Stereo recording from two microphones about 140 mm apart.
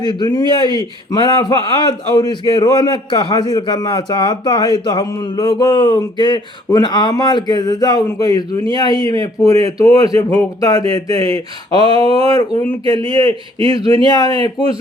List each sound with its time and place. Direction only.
0.0 s a man's voice: 30° left (ahead or behind)
13.0 s a man's voice: 35° right (ahead or behind)